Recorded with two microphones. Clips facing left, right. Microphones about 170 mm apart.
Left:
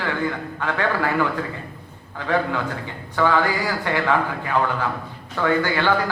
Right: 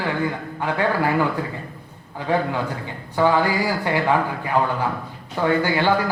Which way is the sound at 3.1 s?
15° right (ahead or behind).